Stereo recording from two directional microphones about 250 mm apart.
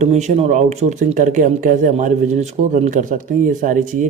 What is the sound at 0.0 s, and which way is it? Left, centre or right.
Speech, right.